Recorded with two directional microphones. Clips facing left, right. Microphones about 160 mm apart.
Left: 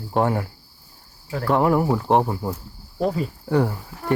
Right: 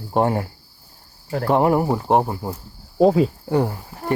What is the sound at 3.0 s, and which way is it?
Cricket, 90° right.